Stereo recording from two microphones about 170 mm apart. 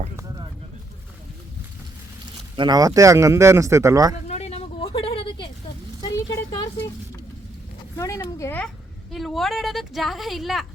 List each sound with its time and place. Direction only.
2.6 s speech: 25° right (ahead or behind)
4.3 s vehicle: 40° left (ahead or behind)
6.1 s a sound: 25° left (ahead or behind)
7.9 s speech: 20° left (ahead or behind)
9.1 s speech: centre (ahead or behind)